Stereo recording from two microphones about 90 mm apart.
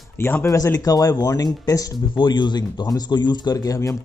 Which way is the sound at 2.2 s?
60° left (ahead or behind).